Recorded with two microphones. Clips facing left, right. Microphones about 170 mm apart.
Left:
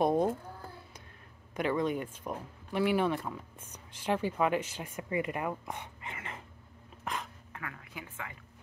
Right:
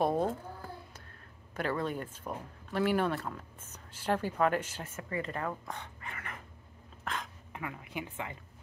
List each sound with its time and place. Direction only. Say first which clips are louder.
0.0 s a sound: left 2 dB; 15° left (ahead or behind)
1.5 s speech: left 3 dB; 15° left (ahead or behind)
7.5 s a woman's voice: right 5 dB; 20° right (ahead or behind)